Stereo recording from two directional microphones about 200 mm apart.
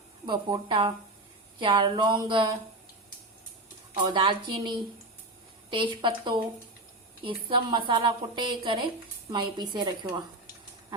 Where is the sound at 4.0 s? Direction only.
25° right (ahead or behind).